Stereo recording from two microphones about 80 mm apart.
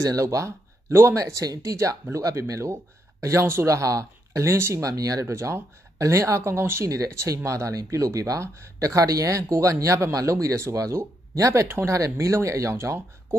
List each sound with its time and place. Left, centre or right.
0.0 s speech: right